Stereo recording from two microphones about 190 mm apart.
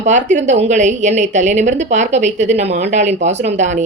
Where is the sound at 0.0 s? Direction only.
40° right (ahead or behind).